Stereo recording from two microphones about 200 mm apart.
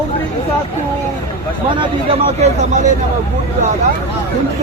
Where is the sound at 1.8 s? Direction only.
30° right (ahead or behind).